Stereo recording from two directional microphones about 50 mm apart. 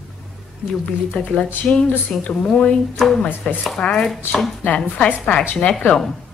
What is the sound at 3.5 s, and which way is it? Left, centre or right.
Speech, left.